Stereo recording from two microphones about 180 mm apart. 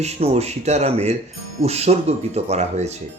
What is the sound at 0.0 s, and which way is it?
Speech, 35° right (ahead or behind).